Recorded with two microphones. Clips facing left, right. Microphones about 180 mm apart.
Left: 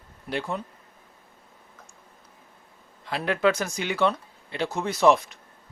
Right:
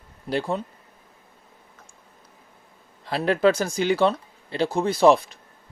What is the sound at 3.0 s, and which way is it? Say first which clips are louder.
Speech: right 4 dB; 35° right (ahead or behind).